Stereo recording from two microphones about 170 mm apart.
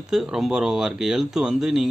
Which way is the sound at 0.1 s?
Centre (ahead or behind).